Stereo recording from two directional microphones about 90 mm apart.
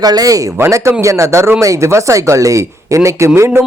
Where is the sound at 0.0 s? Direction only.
45° right (ahead or behind).